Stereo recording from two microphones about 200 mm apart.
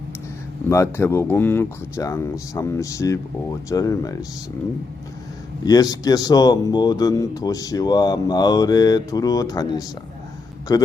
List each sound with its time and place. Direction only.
0.7 s speech: 15° left (ahead or behind)
5.6 s speech: 20° left (ahead or behind)